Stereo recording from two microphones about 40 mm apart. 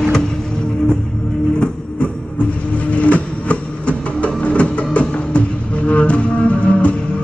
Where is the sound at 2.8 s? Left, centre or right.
Left.